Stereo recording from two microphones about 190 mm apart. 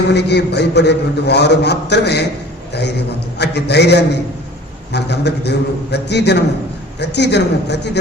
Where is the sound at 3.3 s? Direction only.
60° left (ahead or behind).